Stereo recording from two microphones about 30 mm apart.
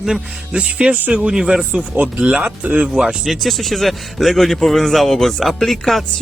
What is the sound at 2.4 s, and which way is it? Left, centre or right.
Speech, right.